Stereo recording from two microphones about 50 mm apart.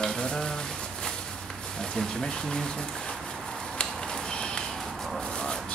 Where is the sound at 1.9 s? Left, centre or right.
Centre.